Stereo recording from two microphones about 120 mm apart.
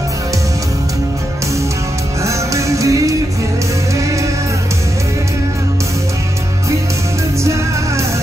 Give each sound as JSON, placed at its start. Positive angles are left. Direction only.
{"t": 2.2, "sound": "music", "side_deg": -25}